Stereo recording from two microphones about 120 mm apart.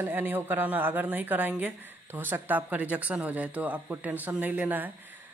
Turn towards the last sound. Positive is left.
turn(degrees=-15)  # may be behind; listen again after turning